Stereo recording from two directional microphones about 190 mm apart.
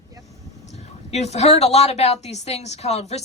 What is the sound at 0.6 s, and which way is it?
Speech, 35° left (ahead or behind).